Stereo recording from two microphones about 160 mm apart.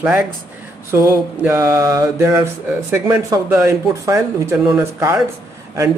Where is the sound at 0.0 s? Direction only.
5° right (ahead or behind).